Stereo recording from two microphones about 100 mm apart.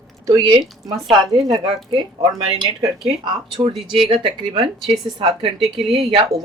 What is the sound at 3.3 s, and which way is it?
Speech, 45° right (ahead or behind).